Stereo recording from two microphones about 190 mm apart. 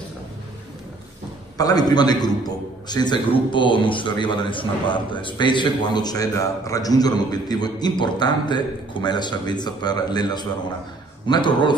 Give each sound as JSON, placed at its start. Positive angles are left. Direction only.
{"t": 1.6, "sound": "a man's voice", "side_deg": 20}